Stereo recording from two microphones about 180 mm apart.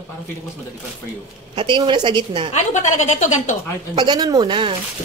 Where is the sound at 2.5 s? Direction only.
40° left (ahead or behind).